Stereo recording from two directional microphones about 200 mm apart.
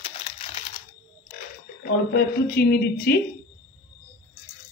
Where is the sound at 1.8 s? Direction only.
50° left (ahead or behind).